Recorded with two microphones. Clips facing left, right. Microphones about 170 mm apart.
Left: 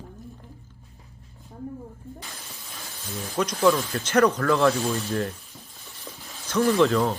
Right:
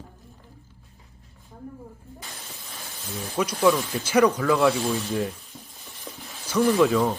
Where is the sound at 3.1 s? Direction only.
5° right (ahead or behind).